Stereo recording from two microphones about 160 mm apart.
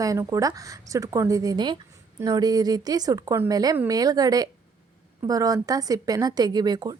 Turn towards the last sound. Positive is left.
turn(degrees=-25)  # may be behind; listen again after turning